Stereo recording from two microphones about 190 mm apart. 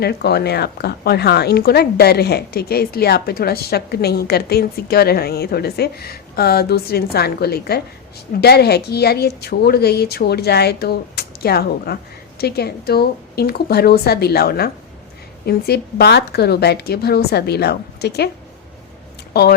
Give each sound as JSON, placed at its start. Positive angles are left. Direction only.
{"t": 0.0, "sound": "speech", "side_deg": 60}
{"t": 19.3, "sound": "speech", "side_deg": 55}